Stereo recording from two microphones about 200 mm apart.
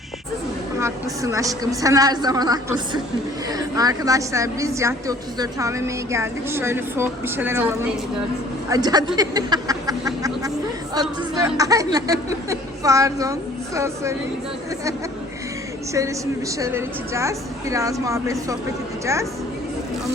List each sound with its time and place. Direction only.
0.8 s a woman's voice: 15° right (ahead or behind)
9.1 s a sound: 20° right (ahead or behind)
11.3 s a woman's voice: 15° right (ahead or behind)
15.9 s a woman's voice: 15° right (ahead or behind)